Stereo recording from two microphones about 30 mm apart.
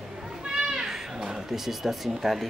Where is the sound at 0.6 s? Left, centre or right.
Centre.